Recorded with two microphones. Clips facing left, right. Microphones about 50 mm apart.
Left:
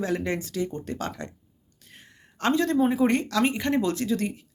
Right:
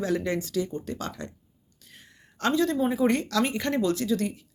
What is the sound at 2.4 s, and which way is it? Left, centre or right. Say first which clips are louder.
Speech: left 2 dB; left.